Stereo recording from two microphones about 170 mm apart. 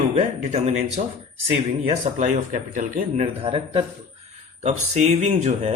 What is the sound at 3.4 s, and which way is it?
Speech, 30° right (ahead or behind).